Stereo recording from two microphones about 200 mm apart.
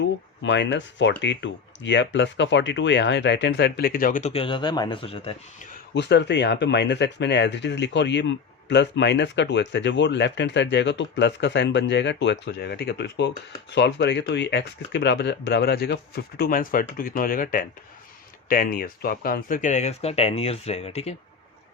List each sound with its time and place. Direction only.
0.4 s speech: 60° left (ahead or behind); by 5.4 s 30° left (ahead or behind)
5.9 s speech: 60° left (ahead or behind); by 21.2 s 30° left (ahead or behind)